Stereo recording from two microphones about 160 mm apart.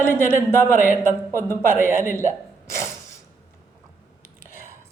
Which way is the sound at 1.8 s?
15° right (ahead or behind).